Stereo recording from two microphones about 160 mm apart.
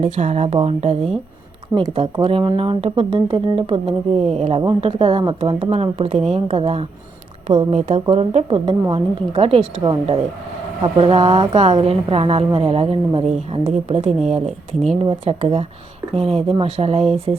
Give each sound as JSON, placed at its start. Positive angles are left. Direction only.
{"t": 0.0, "sound": "a woman's voice", "side_deg": -45}
{"t": 2.2, "sound": "a woman's voice", "side_deg": -35}